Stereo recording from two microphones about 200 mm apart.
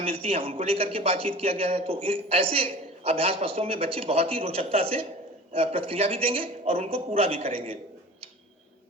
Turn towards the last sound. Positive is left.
turn(degrees=-30)  # may be behind; listen again after turning